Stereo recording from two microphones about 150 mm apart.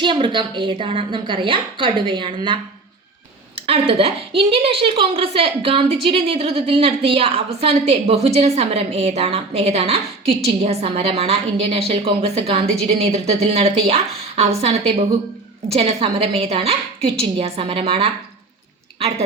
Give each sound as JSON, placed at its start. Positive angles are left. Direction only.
{"t": 0.0, "sound": "a woman's voice", "side_deg": -35}